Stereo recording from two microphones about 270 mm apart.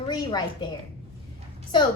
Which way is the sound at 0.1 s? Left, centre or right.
Centre.